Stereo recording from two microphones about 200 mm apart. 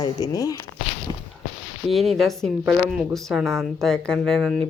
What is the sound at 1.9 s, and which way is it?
Speech, centre (ahead or behind).